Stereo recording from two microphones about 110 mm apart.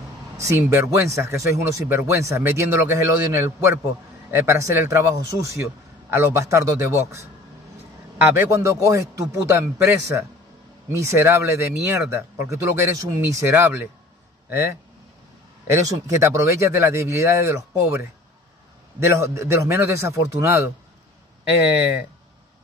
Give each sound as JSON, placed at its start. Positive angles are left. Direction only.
{"t": 0.4, "sound": "speech", "side_deg": -30}
{"t": 8.4, "sound": "speech", "side_deg": -25}
{"t": 15.6, "sound": "speech", "side_deg": -25}